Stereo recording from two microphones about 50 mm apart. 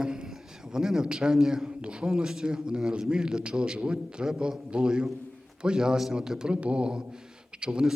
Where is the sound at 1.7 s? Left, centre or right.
Centre.